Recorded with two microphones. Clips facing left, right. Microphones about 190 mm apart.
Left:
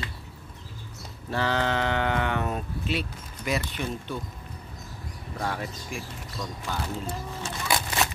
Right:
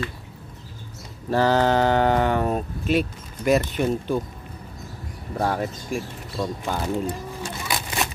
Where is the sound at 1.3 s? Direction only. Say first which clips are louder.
Right 8 dB; 40° right (ahead or behind).